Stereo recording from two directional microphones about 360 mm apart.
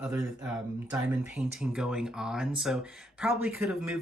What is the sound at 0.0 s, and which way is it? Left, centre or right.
Speech, centre.